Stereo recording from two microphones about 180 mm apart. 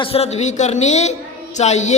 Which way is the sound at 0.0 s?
35° left (ahead or behind).